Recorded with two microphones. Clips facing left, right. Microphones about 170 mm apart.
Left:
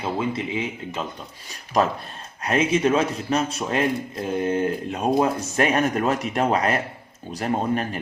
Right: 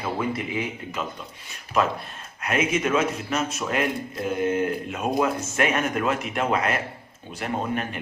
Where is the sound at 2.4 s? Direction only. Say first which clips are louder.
Left 4 dB; 30° left (ahead or behind).